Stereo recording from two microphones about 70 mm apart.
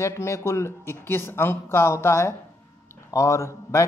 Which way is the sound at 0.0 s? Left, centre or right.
Left.